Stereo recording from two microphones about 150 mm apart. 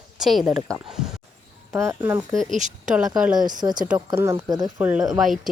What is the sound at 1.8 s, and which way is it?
Speech, 15° right (ahead or behind).